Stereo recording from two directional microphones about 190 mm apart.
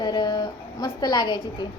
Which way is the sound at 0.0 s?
20° left (ahead or behind).